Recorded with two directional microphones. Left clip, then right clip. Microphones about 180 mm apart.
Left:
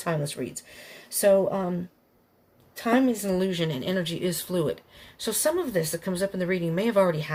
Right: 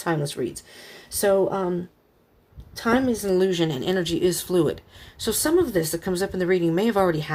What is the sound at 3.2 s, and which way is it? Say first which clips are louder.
Speech: right 6 dB; 40° right (ahead or behind).